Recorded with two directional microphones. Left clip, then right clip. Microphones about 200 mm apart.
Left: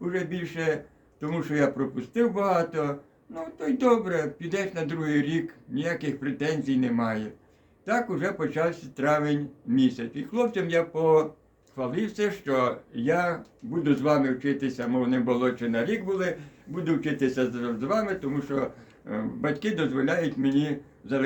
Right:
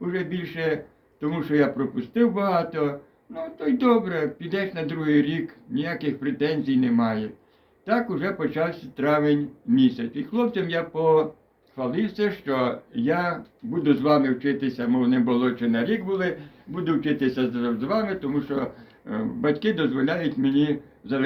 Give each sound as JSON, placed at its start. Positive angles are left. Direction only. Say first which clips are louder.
{"t": 0.1, "sound": "speech", "louder": "right 3 dB", "side_deg": 10}